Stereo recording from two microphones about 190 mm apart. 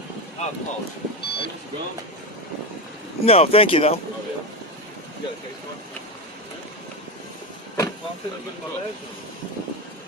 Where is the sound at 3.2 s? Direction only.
30° left (ahead or behind).